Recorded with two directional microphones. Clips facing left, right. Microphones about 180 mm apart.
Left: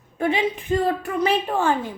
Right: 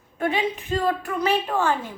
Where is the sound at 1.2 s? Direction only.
20° left (ahead or behind).